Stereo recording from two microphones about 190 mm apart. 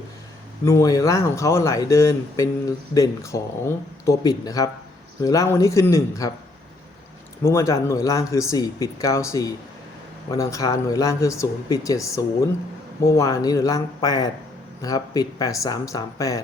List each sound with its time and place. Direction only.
0.6 s speech: 15° left (ahead or behind)
7.4 s speech: 15° left (ahead or behind)